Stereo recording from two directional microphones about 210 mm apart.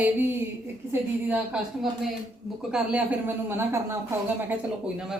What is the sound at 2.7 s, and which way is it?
A woman's voice, 5° right (ahead or behind).